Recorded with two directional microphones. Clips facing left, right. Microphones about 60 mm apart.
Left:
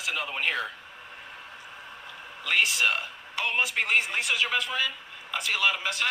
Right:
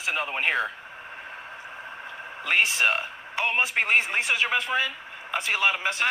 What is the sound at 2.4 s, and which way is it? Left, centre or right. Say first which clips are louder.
Speech: right 2 dB; right.